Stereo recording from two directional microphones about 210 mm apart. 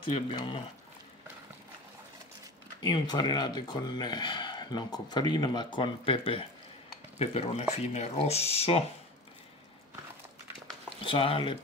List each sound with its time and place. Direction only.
0.1 s speech: 25° left (ahead or behind)
2.8 s speech: 20° left (ahead or behind)
11.1 s speech: 25° left (ahead or behind)